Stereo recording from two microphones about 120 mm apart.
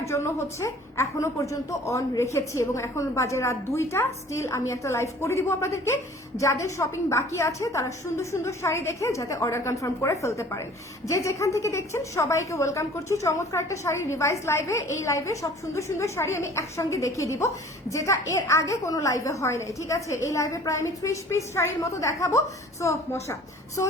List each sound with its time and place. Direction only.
0.0 s a woman's voice: 25° left (ahead or behind)